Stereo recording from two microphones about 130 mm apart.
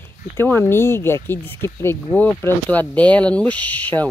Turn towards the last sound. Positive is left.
turn(degrees=15)  # may be behind; listen again after turning